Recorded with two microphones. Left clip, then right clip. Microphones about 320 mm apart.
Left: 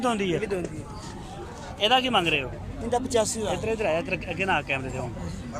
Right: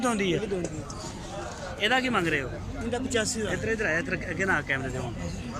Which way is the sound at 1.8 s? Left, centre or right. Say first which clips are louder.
Left 4 dB; centre.